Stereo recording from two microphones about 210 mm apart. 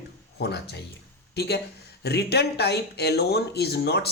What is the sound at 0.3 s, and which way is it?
Speech, 50° left (ahead or behind).